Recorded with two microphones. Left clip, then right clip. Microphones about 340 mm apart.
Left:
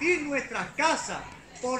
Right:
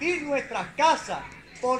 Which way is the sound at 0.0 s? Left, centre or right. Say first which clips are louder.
Even; centre.